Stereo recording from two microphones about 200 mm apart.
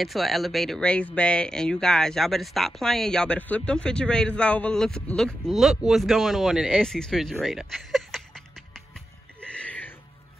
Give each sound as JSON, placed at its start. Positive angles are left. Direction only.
{"t": 0.0, "sound": "speech", "side_deg": 0}
{"t": 9.7, "sound": "music", "side_deg": 10}